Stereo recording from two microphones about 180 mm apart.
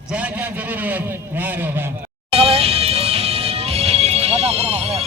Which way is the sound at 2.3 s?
30° right (ahead or behind).